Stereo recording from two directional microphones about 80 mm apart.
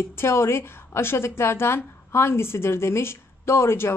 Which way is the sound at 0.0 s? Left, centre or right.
Left.